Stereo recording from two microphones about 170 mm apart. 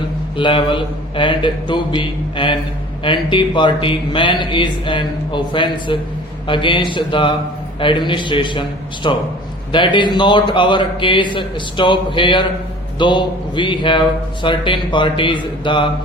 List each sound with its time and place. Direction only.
0.3 s a man's voice: 30° left (ahead or behind)